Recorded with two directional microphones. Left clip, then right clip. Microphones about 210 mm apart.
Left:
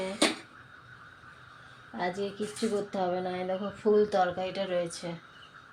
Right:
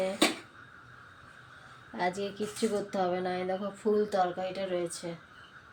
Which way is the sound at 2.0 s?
5° right (ahead or behind).